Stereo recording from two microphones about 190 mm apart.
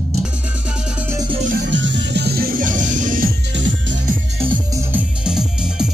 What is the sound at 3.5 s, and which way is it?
Music, 70° right (ahead or behind).